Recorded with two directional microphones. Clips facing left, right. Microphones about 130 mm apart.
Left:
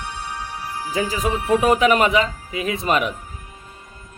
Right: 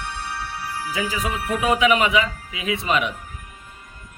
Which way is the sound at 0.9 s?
40° left (ahead or behind).